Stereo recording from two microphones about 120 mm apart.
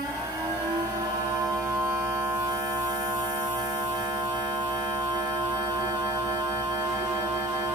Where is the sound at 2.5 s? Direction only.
30° right (ahead or behind).